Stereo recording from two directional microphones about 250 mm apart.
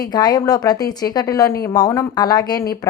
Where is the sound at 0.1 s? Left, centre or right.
Centre.